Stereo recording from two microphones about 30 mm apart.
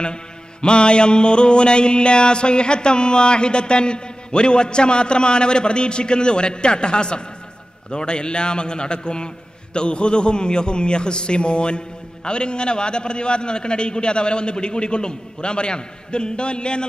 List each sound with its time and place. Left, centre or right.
0.0 s mantra: left